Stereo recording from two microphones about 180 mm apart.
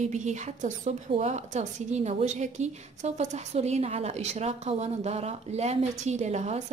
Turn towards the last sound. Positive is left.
turn(degrees=-40)  # may be behind; listen again after turning